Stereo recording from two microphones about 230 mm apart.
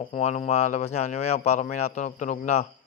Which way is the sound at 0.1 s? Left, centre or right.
Left.